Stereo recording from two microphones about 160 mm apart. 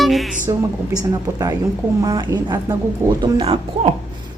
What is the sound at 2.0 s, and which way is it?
A woman's voice, 25° right (ahead or behind).